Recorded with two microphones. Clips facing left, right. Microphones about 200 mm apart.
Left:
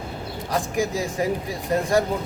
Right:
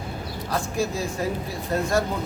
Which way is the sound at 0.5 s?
15° left (ahead or behind).